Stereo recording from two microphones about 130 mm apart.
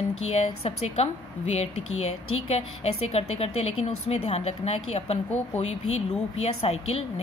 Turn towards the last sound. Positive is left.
turn(degrees=50)  # may be behind; listen again after turning